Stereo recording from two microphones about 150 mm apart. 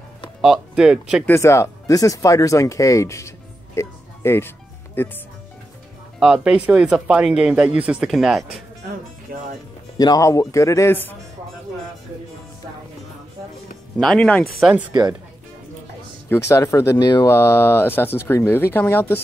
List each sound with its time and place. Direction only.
0.4 s speech: 5° right (ahead or behind)
1.2 s speech: 15° left (ahead or behind)
6.1 s speech: 5° right (ahead or behind)
9.9 s speech: 25° left (ahead or behind)
13.9 s speech: 5° left (ahead or behind)
14.6 s speech: 5° right (ahead or behind)
14.9 s speech: 25° right (ahead or behind)
16.3 s speech: 20° left (ahead or behind)
17.3 s speech: 15° left (ahead or behind)